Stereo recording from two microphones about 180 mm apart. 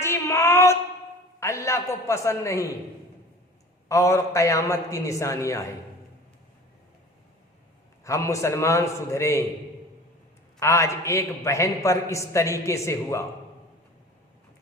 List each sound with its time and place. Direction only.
0.0 s a sound: 15° left (ahead or behind)
1.4 s a man's voice: 15° left (ahead or behind)
3.8 s a man's voice: 15° left (ahead or behind)
8.0 s a man's voice: 15° left (ahead or behind)
10.6 s a man's voice: 15° left (ahead or behind)